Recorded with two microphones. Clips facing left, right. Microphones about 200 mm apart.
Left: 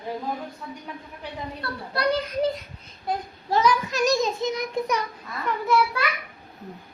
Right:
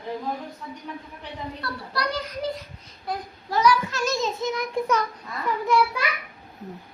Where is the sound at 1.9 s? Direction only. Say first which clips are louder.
Left 6 dB; 25° left (ahead or behind).